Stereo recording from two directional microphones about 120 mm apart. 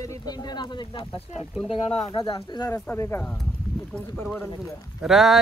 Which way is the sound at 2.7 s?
20° left (ahead or behind).